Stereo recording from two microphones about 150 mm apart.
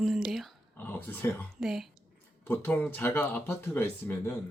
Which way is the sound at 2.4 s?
10° left (ahead or behind).